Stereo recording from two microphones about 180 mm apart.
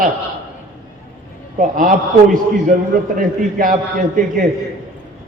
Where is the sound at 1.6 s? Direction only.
50° right (ahead or behind).